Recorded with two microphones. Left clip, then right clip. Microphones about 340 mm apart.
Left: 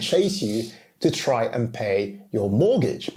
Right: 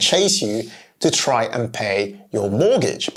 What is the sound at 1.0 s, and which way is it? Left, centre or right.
Speech, right.